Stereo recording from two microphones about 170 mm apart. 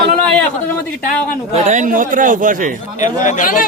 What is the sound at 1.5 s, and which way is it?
Speech, 45° right (ahead or behind).